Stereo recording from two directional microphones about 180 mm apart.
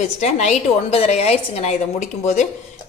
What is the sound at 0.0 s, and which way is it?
A woman's voice, 40° left (ahead or behind).